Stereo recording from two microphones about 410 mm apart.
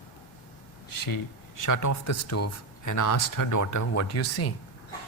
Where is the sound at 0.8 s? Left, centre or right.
Left.